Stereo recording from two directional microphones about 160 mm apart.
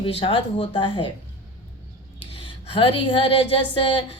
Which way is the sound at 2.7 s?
35° left (ahead or behind).